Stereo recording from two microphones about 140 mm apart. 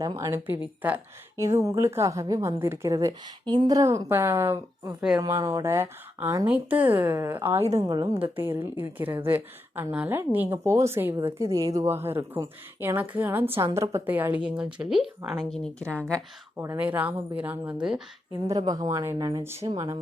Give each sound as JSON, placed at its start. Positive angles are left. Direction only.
{"t": 0.0, "sound": "speech", "side_deg": -25}
{"t": 13.7, "sound": "a woman's voice", "side_deg": -25}
{"t": 16.6, "sound": "speech", "side_deg": -15}
{"t": 18.4, "sound": "speech", "side_deg": -25}